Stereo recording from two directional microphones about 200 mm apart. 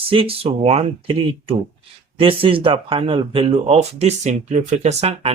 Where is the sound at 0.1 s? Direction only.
25° right (ahead or behind).